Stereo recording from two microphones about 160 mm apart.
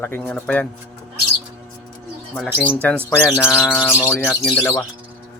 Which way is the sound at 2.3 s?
5° left (ahead or behind).